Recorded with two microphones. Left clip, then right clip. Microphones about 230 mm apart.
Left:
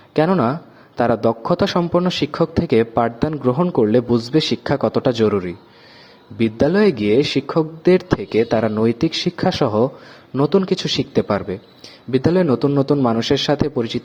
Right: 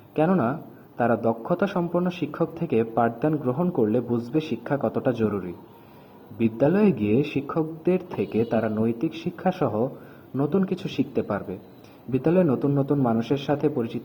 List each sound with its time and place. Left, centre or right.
0.1 s a man's voice: left
6.4 s a man's voice: left